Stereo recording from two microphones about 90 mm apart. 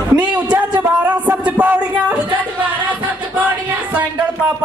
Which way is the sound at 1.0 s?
15° right (ahead or behind).